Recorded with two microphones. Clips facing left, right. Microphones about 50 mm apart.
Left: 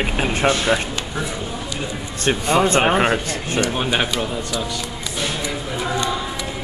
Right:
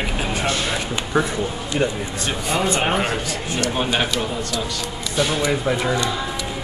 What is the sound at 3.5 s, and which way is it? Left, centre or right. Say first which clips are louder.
Speech: left 1 dB; centre.